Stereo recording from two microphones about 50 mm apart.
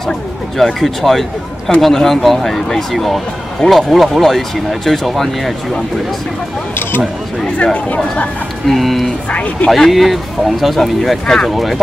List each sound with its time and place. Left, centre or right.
0.6 s speech: centre
7.7 s speech: left
8.6 s speech: centre
9.3 s speech: left
9.8 s speech: centre